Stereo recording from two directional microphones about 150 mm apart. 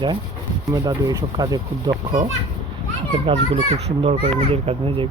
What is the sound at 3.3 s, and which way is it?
Speech, 35° right (ahead or behind).